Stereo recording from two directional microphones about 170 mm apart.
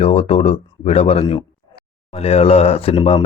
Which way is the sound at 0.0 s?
35° left (ahead or behind).